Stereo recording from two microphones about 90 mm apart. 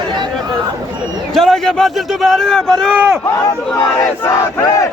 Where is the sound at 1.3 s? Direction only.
5° left (ahead or behind).